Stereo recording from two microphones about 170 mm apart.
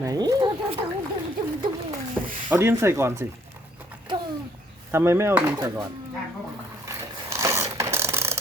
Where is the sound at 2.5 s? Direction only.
15° right (ahead or behind).